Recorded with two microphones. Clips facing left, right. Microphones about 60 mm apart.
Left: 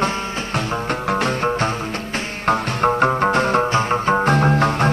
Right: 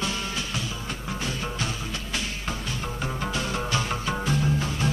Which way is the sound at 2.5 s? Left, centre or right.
Left.